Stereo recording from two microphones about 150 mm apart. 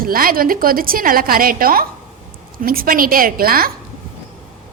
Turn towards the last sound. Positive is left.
turn(degrees=-75)  # may be behind; listen again after turning